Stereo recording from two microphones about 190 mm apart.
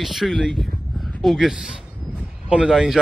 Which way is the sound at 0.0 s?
Centre (ahead or behind).